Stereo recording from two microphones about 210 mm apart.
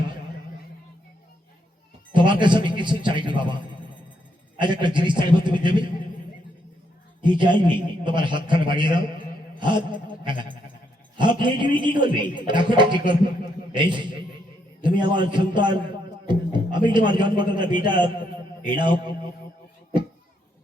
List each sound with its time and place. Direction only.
2.1 s a man's voice: 20° right (ahead or behind)
4.6 s a man's voice: 20° right (ahead or behind)
7.2 s a man's voice: 20° right (ahead or behind)
16.2 s music: 20° right (ahead or behind)
16.7 s a man's voice: 20° right (ahead or behind)